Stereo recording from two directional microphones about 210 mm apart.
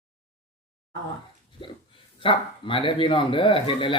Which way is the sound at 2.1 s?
25° left (ahead or behind).